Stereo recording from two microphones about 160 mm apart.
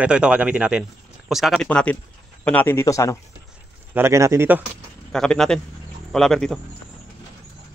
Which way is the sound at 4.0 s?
20° right (ahead or behind).